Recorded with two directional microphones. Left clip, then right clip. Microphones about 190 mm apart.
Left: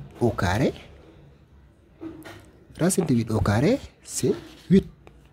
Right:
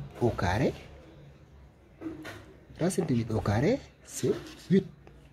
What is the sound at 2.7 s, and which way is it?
Speech, 20° left (ahead or behind).